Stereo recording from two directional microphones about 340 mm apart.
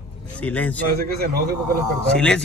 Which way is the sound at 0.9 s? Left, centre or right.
Right.